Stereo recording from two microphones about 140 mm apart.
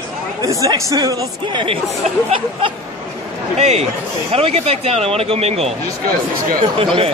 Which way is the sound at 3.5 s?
50° right (ahead or behind).